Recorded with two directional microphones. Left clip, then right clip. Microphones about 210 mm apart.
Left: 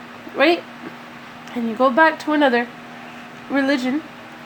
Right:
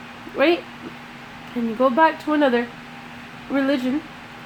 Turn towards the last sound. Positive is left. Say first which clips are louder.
# left 2 dB
turn(degrees=25)  # may be behind; listen again after turning